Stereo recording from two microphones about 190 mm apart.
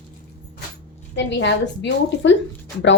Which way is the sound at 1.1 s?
70° left (ahead or behind).